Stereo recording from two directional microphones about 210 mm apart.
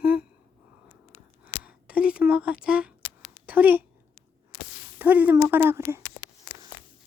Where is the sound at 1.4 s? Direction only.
5° right (ahead or behind).